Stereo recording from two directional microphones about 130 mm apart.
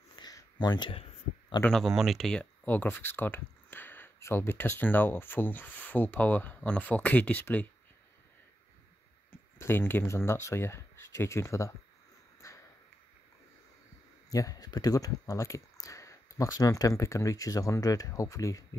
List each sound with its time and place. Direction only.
0.1 s a sound: 30° left (ahead or behind)
1.7 s speech: centre (ahead or behind)
2.6 s speech: 15° left (ahead or behind)
9.3 s speech: 15° left (ahead or behind)
12.4 s a sound: 25° left (ahead or behind)
14.3 s speech: 30° left (ahead or behind)